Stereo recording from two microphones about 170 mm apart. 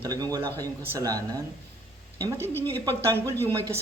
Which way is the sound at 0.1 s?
20° right (ahead or behind).